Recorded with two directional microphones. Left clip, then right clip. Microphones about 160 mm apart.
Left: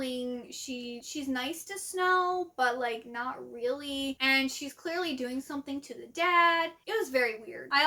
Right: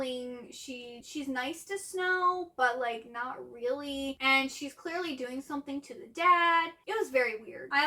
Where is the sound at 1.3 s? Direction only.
40° left (ahead or behind).